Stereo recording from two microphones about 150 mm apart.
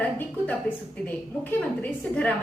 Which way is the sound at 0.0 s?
10° left (ahead or behind).